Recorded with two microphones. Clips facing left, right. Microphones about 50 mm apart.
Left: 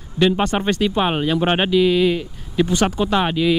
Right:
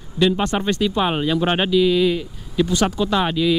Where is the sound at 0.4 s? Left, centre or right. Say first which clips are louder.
Left 1 dB; centre.